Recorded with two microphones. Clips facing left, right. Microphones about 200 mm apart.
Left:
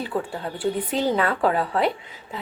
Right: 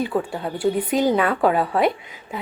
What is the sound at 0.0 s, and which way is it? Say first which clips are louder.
A woman's voice: right 4 dB; 15° right (ahead or behind).